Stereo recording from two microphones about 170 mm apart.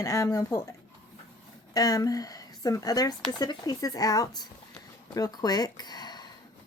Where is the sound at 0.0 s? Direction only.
15° left (ahead or behind).